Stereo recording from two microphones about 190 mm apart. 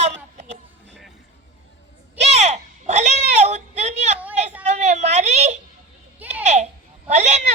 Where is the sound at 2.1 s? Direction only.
35° right (ahead or behind).